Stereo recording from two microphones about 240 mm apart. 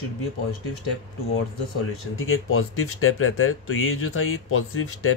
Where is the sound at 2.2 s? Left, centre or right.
Left.